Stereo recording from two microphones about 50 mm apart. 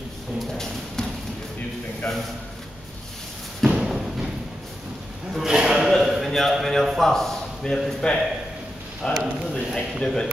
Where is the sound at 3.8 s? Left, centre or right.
Centre.